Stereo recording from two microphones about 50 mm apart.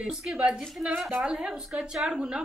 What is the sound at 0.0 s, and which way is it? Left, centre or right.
A woman's voice, centre.